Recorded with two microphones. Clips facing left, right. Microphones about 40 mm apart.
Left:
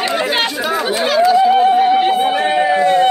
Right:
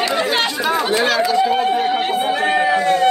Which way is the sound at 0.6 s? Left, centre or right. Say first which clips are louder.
Even; centre.